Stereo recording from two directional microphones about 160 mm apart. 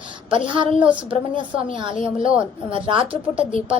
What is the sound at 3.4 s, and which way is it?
Speech, 35° right (ahead or behind).